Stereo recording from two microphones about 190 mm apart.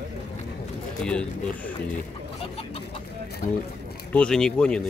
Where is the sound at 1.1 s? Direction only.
5° left (ahead or behind).